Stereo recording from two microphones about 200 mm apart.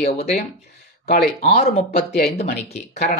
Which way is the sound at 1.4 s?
30° left (ahead or behind).